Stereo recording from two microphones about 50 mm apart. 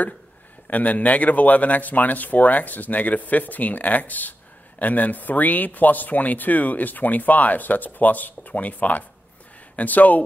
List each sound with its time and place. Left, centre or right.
0.7 s speech: left